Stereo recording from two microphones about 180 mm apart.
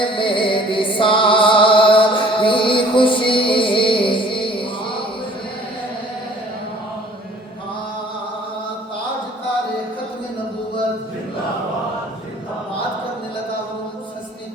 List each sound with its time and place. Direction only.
0.0 s music: 30° left (ahead or behind)